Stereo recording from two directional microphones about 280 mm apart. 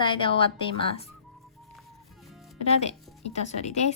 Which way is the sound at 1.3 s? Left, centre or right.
Centre.